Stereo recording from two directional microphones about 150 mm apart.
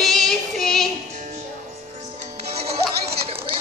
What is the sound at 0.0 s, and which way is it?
Child singing, centre (ahead or behind).